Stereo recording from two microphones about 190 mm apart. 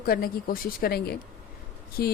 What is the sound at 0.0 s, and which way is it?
A woman's voice, 50° left (ahead or behind).